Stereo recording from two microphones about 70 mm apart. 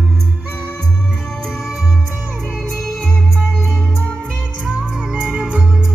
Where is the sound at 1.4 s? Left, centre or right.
Centre.